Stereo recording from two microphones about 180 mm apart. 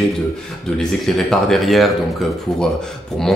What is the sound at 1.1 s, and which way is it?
Speech, centre (ahead or behind).